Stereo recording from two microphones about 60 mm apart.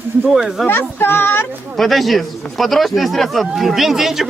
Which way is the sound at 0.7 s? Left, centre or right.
Left.